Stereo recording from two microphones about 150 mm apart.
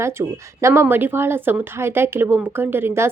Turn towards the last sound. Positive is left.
turn(degrees=-15)  # may be behind; listen again after turning